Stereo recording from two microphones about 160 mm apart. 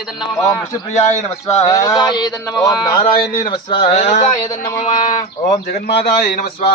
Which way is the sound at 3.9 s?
45° left (ahead or behind).